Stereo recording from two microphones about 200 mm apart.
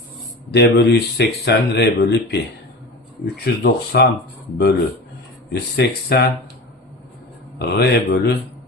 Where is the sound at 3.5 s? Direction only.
55° left (ahead or behind).